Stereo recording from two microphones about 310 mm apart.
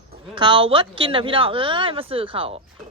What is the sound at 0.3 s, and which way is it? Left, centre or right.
Speech, centre.